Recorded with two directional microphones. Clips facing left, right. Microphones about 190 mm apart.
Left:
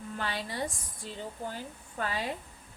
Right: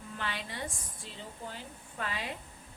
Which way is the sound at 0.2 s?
40° left (ahead or behind).